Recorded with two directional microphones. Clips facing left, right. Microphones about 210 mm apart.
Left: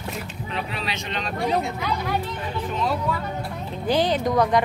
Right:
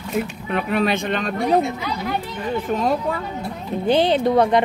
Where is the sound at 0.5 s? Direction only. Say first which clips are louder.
Right 11 dB; 55° right (ahead or behind).